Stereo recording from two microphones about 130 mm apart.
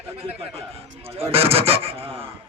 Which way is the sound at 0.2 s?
50° right (ahead or behind).